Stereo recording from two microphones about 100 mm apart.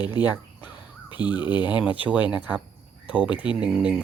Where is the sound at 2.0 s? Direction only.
15° right (ahead or behind).